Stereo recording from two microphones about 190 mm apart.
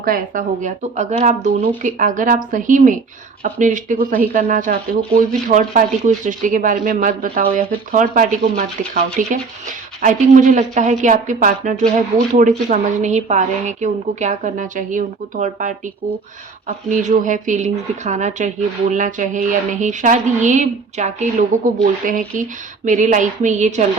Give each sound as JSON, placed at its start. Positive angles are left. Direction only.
{"t": 0.0, "sound": "speech", "side_deg": -45}